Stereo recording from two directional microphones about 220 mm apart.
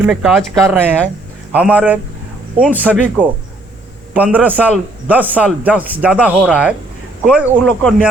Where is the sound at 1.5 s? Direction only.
5° right (ahead or behind).